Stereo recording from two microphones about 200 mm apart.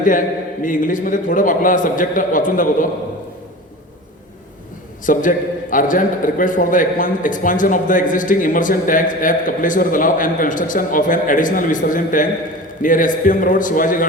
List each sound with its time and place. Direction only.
0.0 s a man's voice: 40° left (ahead or behind)
5.1 s a man's voice: 45° left (ahead or behind)